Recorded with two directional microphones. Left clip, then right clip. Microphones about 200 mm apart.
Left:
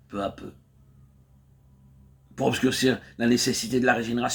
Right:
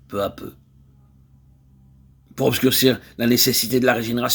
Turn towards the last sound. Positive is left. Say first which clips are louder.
# right 4 dB
turn(degrees=-50)  # may be behind; listen again after turning